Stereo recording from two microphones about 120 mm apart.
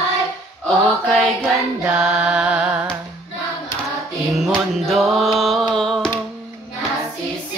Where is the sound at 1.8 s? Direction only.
10° right (ahead or behind).